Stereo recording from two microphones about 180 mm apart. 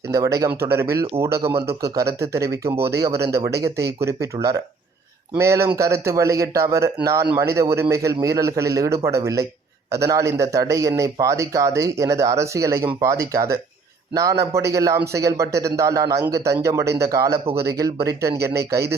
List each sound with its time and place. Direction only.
0.1 s speech: 15° right (ahead or behind)